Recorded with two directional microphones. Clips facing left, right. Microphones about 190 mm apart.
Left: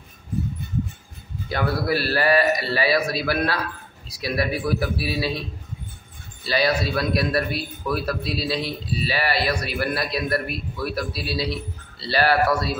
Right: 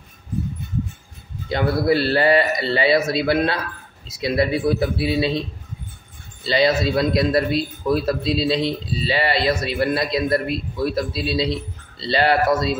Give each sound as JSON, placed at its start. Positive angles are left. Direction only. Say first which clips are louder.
{"t": 1.5, "sound": "a man's voice", "louder": "right 5 dB", "side_deg": -25}
{"t": 6.4, "sound": "a man's voice", "louder": "right 4 dB", "side_deg": -25}